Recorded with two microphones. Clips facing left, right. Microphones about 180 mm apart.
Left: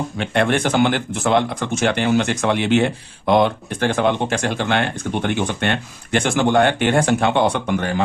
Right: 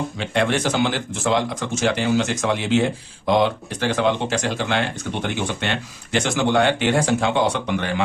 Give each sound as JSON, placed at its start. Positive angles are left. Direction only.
{"t": 0.2, "sound": "speech", "side_deg": 55}